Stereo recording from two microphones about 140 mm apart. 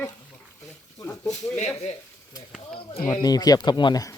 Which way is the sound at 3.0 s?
25° left (ahead or behind).